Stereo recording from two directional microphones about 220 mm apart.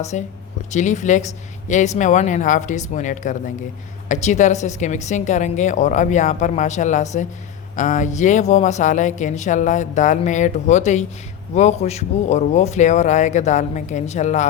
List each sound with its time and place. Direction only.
0.0 s speech: 30° left (ahead or behind)